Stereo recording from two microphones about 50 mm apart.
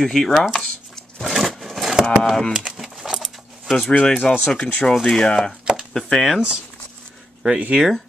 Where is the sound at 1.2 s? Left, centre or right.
Centre.